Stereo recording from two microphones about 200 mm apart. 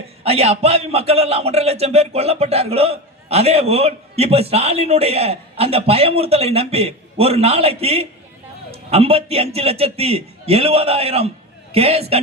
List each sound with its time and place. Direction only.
0.2 s a man's voice: 30° right (ahead or behind)